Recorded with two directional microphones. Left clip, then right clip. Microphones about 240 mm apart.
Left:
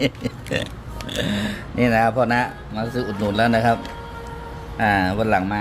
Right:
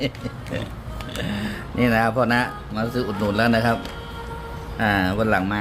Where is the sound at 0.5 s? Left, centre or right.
Left.